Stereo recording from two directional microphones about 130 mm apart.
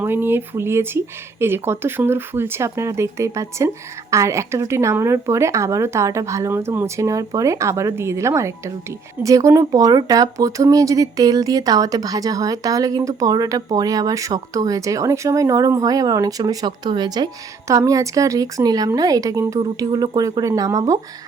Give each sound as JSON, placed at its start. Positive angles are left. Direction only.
{"t": 0.0, "sound": "speech", "side_deg": -15}